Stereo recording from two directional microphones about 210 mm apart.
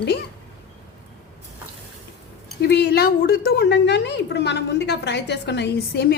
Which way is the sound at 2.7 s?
50° left (ahead or behind).